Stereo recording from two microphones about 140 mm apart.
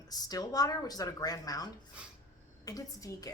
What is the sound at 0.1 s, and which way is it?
Speech, 25° left (ahead or behind).